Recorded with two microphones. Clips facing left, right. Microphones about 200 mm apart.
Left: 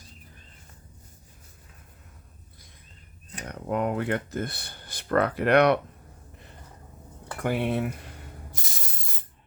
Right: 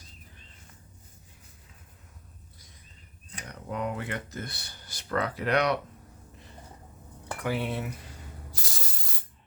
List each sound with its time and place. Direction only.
3.4 s speech: 55° left (ahead or behind)
7.4 s speech: 55° left (ahead or behind)
8.5 s spray: 20° left (ahead or behind)